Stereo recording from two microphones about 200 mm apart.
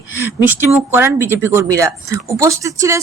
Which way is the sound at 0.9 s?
10° right (ahead or behind).